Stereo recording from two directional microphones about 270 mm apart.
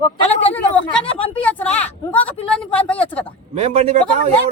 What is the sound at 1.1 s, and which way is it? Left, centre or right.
Speech, centre.